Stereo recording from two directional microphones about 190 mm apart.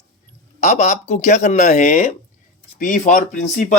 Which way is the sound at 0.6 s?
40° left (ahead or behind).